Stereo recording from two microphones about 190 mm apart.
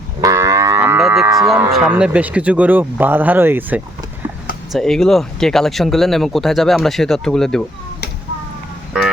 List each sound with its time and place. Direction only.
0.2 s livestock: 15° right (ahead or behind)
1.5 s moo: 5° right (ahead or behind)
4.7 s speech: centre (ahead or behind)